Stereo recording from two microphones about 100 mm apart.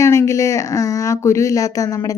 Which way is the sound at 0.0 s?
30° left (ahead or behind).